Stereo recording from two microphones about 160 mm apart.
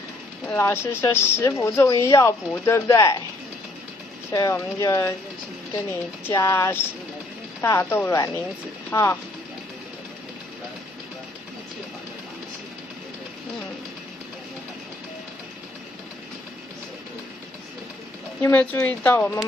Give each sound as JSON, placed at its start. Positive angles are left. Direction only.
{"t": 0.5, "sound": "speech", "side_deg": 15}
{"t": 4.3, "sound": "speech", "side_deg": 20}
{"t": 6.2, "sound": "speech", "side_deg": 15}
{"t": 18.4, "sound": "speech", "side_deg": 10}